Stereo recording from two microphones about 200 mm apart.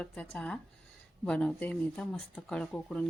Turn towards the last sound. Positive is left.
turn(degrees=5)  # may be behind; listen again after turning